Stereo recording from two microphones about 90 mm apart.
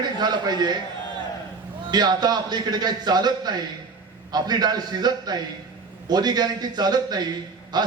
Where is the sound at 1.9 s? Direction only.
50° right (ahead or behind).